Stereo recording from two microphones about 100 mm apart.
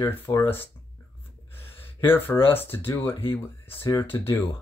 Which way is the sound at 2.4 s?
20° left (ahead or behind).